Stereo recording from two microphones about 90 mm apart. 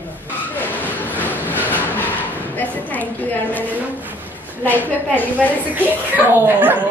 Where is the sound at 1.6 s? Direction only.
20° left (ahead or behind).